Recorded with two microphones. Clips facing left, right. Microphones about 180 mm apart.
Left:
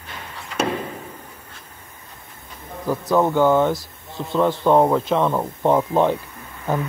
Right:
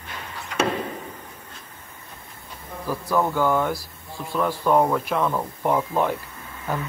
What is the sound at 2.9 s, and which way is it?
Speech, 20° left (ahead or behind).